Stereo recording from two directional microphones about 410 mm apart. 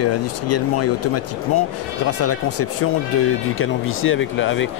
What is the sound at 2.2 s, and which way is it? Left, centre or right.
Speech, left.